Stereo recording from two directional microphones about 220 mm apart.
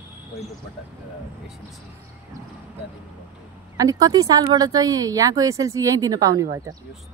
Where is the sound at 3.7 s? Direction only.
15° right (ahead or behind).